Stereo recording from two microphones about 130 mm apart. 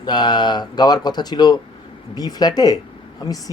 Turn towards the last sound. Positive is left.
turn(degrees=30)  # may be behind; listen again after turning